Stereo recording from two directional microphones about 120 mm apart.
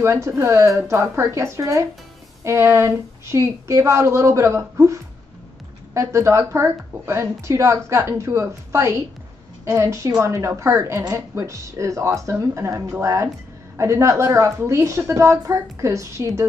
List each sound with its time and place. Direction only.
0.0 s a woman's voice: 25° right (ahead or behind)